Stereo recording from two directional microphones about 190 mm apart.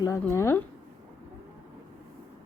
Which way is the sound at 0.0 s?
15° left (ahead or behind).